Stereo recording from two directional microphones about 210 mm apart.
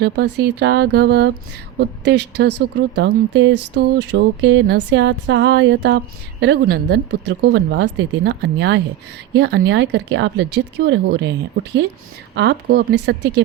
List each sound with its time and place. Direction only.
0.0 s speech: 50° right (ahead or behind); by 3.7 s 75° right (ahead or behind)
3.8 s speech: 55° right (ahead or behind)
12.3 s speech: 55° right (ahead or behind)